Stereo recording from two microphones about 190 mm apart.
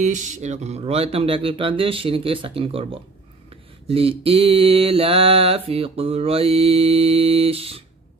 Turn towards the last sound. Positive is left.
turn(degrees=-30)  # may be behind; listen again after turning